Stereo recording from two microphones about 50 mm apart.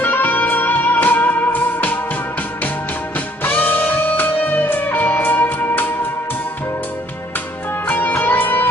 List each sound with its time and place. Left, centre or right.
0.0 s music: left
3.4 s music: left
7.9 s music: left